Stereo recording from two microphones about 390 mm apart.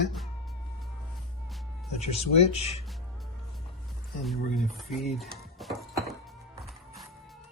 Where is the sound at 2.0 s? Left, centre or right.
Centre.